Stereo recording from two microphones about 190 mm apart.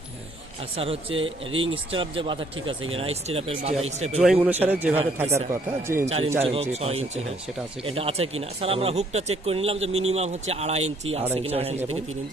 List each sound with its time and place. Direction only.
1.1 s a man's voice: 90° right
1.5 s speech: 30° right (ahead or behind)
4.2 s a man's voice: 5° right (ahead or behind)
6.0 s speech: 35° right (ahead or behind)